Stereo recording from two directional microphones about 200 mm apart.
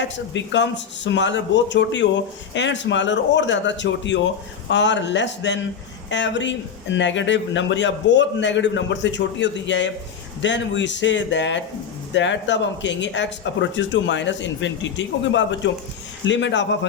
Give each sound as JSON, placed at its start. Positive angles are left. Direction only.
{"t": 0.0, "sound": "a man's voice", "side_deg": 65}